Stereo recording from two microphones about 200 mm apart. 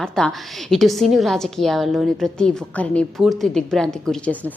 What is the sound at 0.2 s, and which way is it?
A woman's voice, 5° left (ahead or behind).